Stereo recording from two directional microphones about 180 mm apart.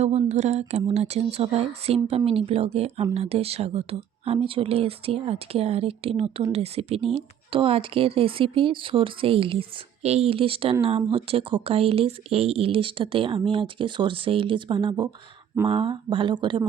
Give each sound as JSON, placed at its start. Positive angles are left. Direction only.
{"t": 0.0, "sound": "speech", "side_deg": -40}